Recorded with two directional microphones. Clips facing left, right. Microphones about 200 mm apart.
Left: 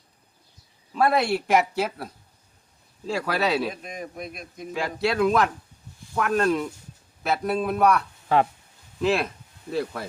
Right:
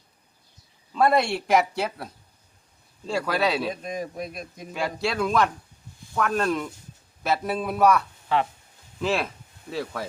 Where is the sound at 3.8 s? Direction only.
40° right (ahead or behind).